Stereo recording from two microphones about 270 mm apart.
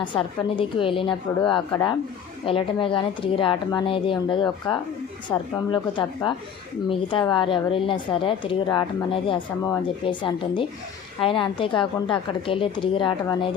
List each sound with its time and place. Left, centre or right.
0.0 s a woman's voice: centre